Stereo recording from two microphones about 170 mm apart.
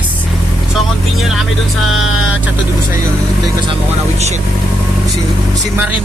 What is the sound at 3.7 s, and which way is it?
Speech, 40° right (ahead or behind).